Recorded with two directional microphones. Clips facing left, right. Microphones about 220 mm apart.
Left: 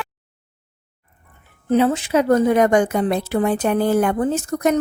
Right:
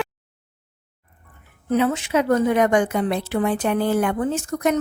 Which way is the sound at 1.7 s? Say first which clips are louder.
Left 3 dB; 30° left (ahead or behind).